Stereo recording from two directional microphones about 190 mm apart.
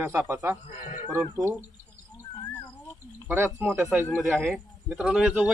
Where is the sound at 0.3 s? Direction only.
10° right (ahead or behind).